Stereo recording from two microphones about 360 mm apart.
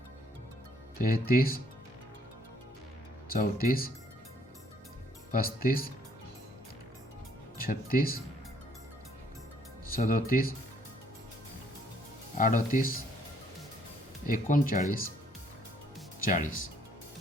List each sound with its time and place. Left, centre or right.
0.9 s speech: left
3.2 s speech: left
5.3 s speech: left
7.6 s speech: left
9.9 s speech: left
12.4 s speech: left
14.3 s speech: left
16.2 s speech: left